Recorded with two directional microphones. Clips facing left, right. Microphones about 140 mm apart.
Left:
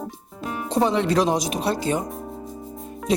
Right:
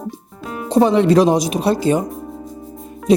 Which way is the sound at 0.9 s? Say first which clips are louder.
Right 8 dB; 10° right (ahead or behind).